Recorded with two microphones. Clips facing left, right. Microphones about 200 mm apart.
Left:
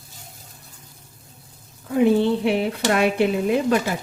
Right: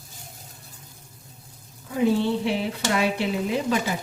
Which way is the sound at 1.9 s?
60° left (ahead or behind).